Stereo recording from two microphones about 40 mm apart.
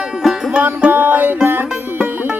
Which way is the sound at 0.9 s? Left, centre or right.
Right.